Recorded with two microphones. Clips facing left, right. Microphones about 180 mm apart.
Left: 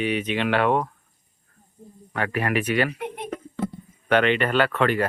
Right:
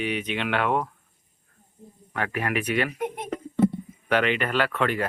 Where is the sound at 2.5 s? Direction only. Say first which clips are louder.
Left 3 dB; centre (ahead or behind).